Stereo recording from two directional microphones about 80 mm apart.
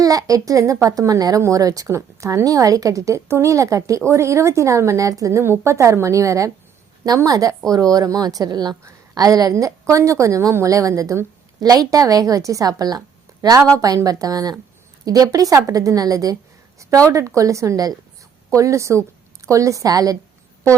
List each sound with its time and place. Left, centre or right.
0.0 s a woman's voice: right
2.0 s a woman's voice: right
5.4 s a woman's voice: right
11.6 s a woman's voice: right